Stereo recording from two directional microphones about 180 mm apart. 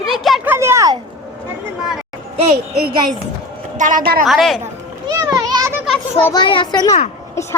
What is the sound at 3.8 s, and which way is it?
Speech, 45° right (ahead or behind).